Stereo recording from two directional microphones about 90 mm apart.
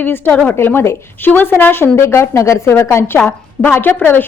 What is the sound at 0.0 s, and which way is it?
A woman's voice, 20° left (ahead or behind).